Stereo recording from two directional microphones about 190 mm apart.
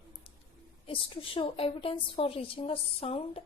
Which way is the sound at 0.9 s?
25° left (ahead or behind).